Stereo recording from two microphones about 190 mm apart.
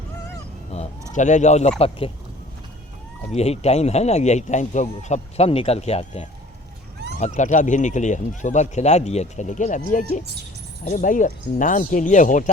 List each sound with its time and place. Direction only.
0.7 s a sound: 35° left (ahead or behind)
1.1 s speech: 40° left (ahead or behind)
3.3 s speech: 35° left (ahead or behind)